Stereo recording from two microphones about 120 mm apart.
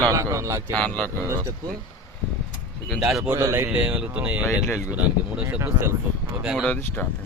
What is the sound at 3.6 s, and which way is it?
Speech, 10° right (ahead or behind).